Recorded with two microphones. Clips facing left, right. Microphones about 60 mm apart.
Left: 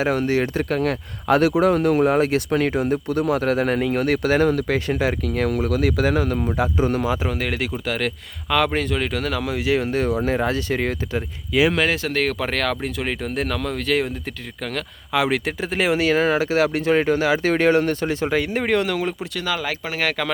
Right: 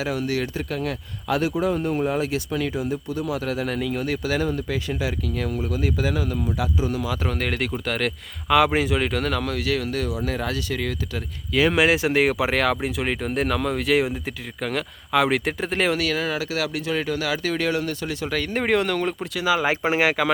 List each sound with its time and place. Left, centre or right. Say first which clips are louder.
0.0 s speech: left 5 dB; left
0.3 s speech: left 5 dB; left
0.5 s speech: left 6 dB; left
1.5 s speech: left 6 dB; left
2.1 s speech: left 6 dB; left
7.2 s speech: left 1 dB; centre
9.5 s speech: left 4 dB; left
11.7 s speech: right 2 dB; centre
16.0 s speech: left 6 dB; left
18.3 s speech: left 3 dB; centre
18.5 s speech: left 1 dB; centre
19.5 s speech: right 6 dB; right